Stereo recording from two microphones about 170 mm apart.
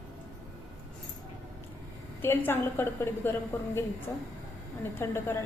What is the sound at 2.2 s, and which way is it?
A woman's voice, 15° left (ahead or behind).